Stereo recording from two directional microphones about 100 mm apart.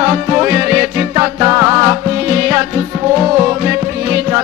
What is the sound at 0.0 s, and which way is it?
Music, 20° right (ahead or behind).